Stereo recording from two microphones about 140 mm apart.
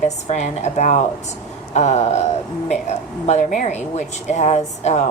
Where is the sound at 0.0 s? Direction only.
55° left (ahead or behind).